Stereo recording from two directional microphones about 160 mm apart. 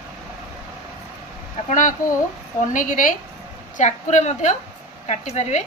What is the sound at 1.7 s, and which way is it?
A woman's voice, 55° left (ahead or behind).